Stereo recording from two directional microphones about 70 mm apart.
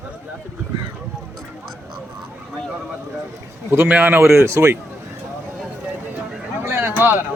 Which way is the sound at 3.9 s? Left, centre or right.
Right.